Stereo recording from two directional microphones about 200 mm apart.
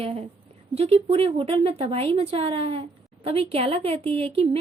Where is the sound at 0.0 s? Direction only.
30° right (ahead or behind).